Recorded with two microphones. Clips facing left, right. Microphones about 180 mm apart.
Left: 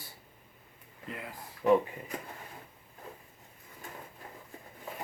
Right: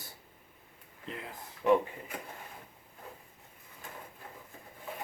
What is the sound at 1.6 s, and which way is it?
Speech, centre (ahead or behind).